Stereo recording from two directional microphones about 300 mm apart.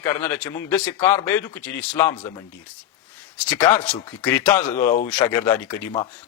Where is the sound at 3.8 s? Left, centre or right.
Centre.